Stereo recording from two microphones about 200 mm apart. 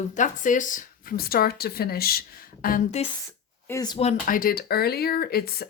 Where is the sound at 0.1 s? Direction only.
40° left (ahead or behind).